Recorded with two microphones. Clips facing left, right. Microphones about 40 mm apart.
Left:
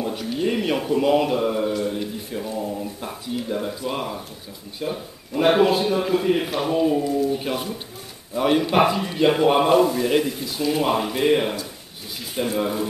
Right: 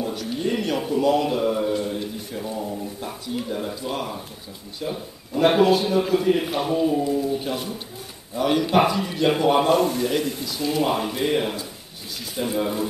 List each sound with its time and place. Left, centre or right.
0.0 s speech: centre
1.7 s a man's voice: centre
7.0 s a man's voice: centre
7.2 s a man's voice: centre